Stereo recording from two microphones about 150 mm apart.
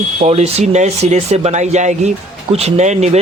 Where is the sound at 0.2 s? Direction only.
45° right (ahead or behind).